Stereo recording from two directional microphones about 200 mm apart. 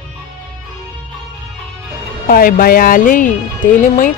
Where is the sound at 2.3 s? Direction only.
45° left (ahead or behind).